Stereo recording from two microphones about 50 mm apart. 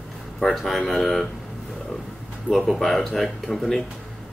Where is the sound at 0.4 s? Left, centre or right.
Centre.